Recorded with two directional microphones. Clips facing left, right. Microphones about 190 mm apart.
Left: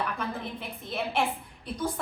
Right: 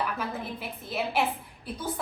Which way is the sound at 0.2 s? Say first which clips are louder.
Even; 5° right (ahead or behind).